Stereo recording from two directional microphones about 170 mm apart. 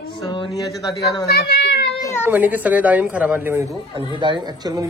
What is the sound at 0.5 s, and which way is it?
Speech, centre (ahead or behind).